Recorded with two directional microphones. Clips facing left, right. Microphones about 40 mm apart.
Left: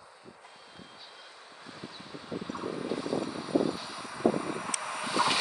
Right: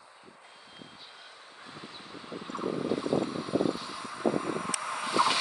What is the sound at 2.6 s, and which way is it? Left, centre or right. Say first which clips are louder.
Vehicle: right 4 dB; centre.